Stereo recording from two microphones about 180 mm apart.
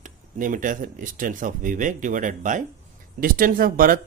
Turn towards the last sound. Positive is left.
turn(degrees=-50)  # may be behind; listen again after turning